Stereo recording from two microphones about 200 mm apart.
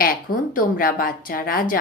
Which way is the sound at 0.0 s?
45° left (ahead or behind).